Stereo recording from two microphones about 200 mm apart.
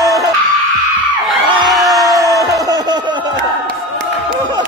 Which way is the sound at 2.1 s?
15° right (ahead or behind).